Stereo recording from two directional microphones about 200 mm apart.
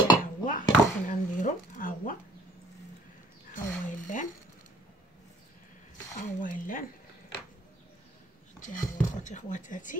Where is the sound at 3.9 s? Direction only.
40° left (ahead or behind).